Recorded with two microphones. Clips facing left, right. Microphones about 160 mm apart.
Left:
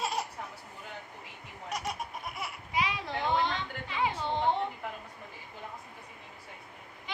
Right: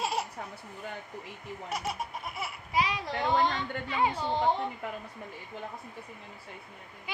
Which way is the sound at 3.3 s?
45° right (ahead or behind).